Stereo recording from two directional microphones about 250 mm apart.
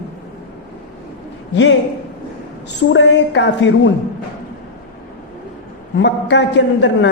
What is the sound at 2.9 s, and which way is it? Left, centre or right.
A woman's voice, left.